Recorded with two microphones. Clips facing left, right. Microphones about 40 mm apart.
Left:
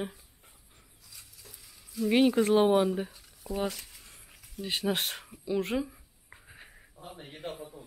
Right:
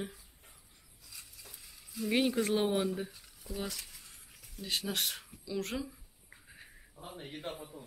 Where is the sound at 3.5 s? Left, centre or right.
Centre.